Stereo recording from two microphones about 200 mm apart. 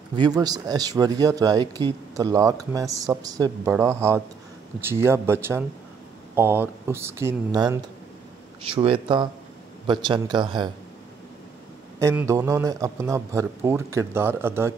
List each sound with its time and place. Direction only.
0.1 s a man's voice: 20° right (ahead or behind)
8.6 s speech: 25° right (ahead or behind)
12.0 s a man's voice: 15° right (ahead or behind)